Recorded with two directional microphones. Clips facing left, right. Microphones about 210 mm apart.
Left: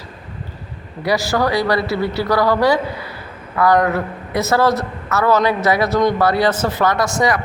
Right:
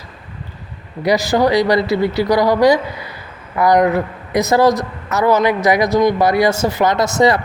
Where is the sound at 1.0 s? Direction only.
20° right (ahead or behind).